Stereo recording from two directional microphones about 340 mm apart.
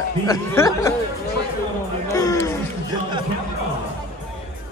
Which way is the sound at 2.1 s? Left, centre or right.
Centre.